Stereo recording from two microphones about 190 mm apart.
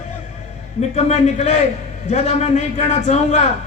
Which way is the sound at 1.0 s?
35° left (ahead or behind).